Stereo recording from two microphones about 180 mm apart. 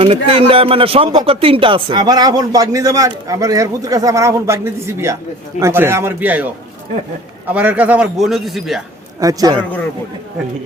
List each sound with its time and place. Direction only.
0.0 s a man's voice: 30° right (ahead or behind); by 8.8 s centre (ahead or behind)
9.2 s speech: 20° right (ahead or behind)